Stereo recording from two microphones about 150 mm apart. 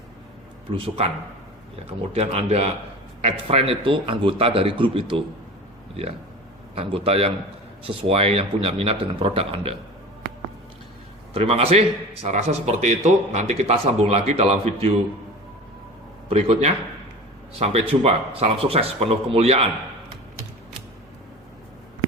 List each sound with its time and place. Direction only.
0.8 s a man's voice: 40° right (ahead or behind)
2.1 s a man's voice: 45° right (ahead or behind)
6.7 s a man's voice: 40° right (ahead or behind)
11.3 s a man's voice: 40° right (ahead or behind)
16.3 s a man's voice: 45° right (ahead or behind)